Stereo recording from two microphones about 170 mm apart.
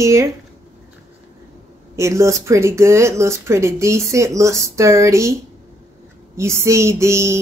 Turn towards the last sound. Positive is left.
turn(degrees=-15)  # may be behind; listen again after turning